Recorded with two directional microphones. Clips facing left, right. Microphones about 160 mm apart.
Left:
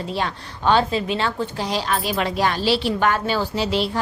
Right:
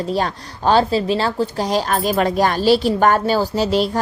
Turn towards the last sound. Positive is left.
turn(degrees=-40)  # may be behind; listen again after turning